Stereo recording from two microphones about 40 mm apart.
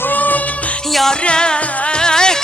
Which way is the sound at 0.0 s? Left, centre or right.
Left.